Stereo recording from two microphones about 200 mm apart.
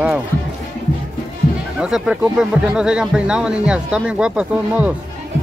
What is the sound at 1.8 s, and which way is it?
Speech, 5° right (ahead or behind).